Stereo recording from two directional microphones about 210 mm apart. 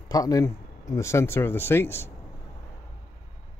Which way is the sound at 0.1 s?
15° left (ahead or behind).